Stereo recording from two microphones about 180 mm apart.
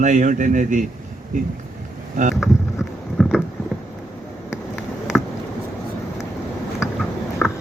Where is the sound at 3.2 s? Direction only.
Centre (ahead or behind).